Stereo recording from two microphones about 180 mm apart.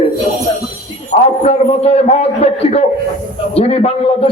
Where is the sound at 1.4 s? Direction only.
35° left (ahead or behind).